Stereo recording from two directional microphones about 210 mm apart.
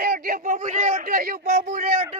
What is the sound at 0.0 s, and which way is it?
Speech, 45° right (ahead or behind).